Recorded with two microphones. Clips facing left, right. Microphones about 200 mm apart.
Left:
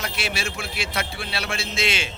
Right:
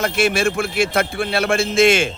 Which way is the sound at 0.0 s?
50° right (ahead or behind).